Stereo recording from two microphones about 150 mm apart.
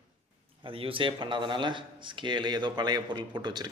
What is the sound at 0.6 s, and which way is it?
Speech, 35° right (ahead or behind).